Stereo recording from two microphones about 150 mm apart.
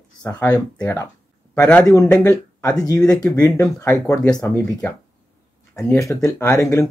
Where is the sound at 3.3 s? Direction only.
10° left (ahead or behind).